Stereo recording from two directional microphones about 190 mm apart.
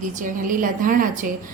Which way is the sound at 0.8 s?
45° right (ahead or behind).